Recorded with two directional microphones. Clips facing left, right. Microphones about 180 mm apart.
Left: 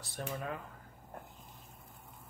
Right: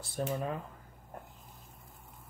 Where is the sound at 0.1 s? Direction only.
30° right (ahead or behind).